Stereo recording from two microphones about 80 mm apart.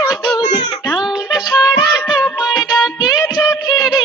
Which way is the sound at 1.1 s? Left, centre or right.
Left.